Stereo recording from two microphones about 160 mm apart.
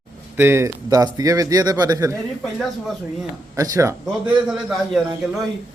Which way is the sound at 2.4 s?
Centre (ahead or behind).